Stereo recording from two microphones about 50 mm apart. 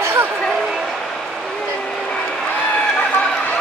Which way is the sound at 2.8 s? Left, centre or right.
Left.